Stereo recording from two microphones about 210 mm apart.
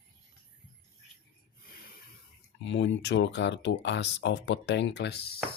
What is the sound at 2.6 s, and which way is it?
Speech, 60° left (ahead or behind).